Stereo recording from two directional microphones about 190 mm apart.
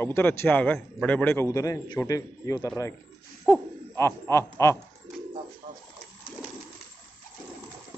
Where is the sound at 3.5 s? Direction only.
15° left (ahead or behind).